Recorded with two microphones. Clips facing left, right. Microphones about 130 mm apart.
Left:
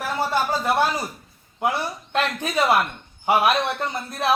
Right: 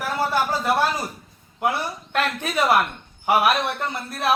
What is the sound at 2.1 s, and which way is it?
A man's voice, 20° left (ahead or behind).